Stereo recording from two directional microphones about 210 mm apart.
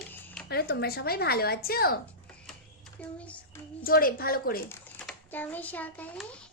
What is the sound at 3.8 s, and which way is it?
Speech, 45° left (ahead or behind).